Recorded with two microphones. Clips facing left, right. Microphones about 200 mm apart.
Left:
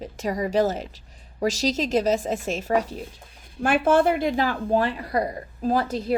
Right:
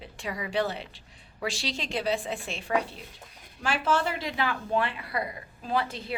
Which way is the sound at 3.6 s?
55° left (ahead or behind).